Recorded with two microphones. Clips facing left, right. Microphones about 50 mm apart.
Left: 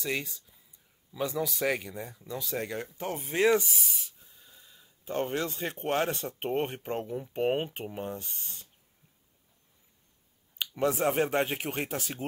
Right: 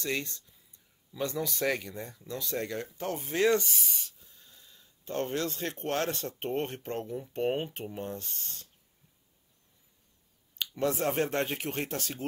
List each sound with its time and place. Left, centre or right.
0.0 s speech: centre
10.8 s speech: centre